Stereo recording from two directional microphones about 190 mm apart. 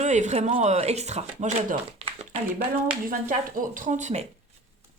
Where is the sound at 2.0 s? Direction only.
30° right (ahead or behind).